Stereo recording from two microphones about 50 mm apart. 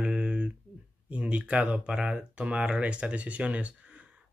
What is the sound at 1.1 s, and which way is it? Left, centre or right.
Speech, right.